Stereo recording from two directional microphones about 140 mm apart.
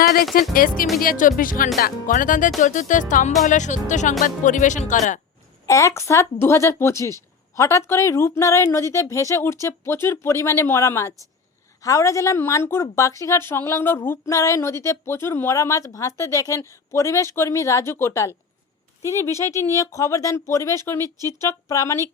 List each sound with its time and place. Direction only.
0.0 s speech: 90° left
0.9 s speech: 80° left; by 5.2 s 60° left (ahead or behind)
5.6 s a woman's voice: 20° left (ahead or behind)
19.5 s a woman's voice: 20° left (ahead or behind)
21.0 s speech: 25° right (ahead or behind)
21.4 s a woman's voice: 20° left (ahead or behind)